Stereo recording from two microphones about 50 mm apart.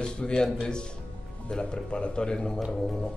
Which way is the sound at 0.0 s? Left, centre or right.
Centre.